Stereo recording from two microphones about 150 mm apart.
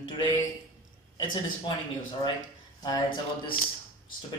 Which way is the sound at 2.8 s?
30° left (ahead or behind).